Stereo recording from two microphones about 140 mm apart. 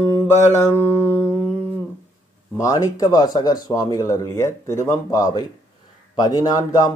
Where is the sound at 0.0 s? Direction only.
20° left (ahead or behind).